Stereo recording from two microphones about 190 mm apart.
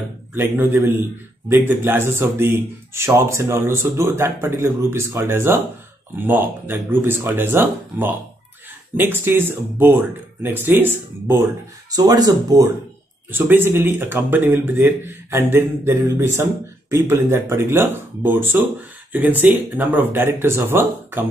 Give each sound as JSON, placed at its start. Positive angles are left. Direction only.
{"t": 0.3, "sound": "a man's voice", "side_deg": -10}